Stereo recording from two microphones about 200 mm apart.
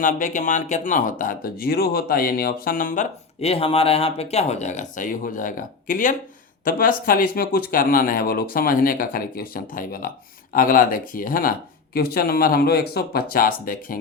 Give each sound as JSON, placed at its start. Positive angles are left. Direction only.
{"t": 0.0, "sound": "speech", "side_deg": 40}